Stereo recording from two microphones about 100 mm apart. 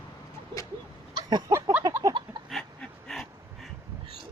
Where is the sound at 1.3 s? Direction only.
45° right (ahead or behind).